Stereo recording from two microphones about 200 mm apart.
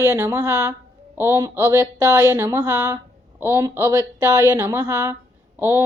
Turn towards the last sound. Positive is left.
turn(degrees=-10)  # may be behind; listen again after turning